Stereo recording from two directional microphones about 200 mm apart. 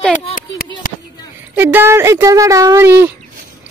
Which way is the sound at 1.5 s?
10° right (ahead or behind).